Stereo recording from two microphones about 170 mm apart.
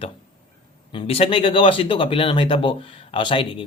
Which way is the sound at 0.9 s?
35° left (ahead or behind).